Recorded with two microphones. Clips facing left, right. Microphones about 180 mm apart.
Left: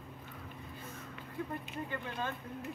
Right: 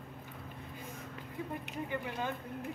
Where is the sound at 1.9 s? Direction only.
15° right (ahead or behind).